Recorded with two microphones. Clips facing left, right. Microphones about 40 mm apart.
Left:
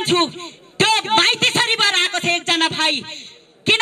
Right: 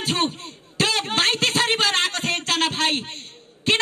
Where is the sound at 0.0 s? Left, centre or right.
Left.